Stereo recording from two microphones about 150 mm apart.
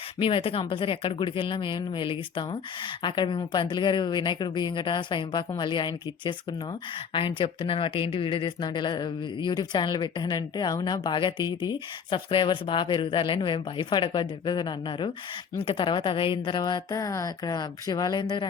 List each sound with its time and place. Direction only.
0.2 s a woman's voice: 35° left (ahead or behind)